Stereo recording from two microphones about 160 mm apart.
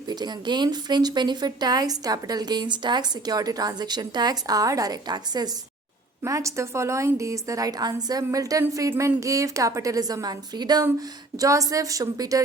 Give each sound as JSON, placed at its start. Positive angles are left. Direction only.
{"t": 0.1, "sound": "speech", "side_deg": -25}